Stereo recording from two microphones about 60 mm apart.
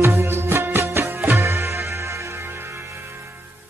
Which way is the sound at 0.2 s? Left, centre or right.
Right.